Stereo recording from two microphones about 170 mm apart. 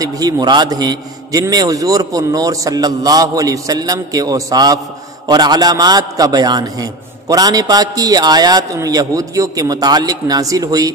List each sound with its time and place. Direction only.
0.0 s a man's voice: 25° right (ahead or behind)